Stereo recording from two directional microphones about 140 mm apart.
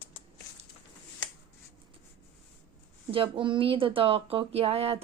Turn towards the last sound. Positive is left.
turn(degrees=-45)  # may be behind; listen again after turning